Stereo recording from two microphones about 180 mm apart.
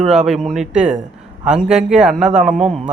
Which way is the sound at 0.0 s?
5° right (ahead or behind).